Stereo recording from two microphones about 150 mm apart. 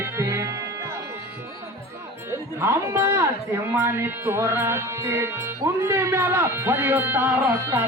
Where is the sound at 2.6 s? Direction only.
15° right (ahead or behind).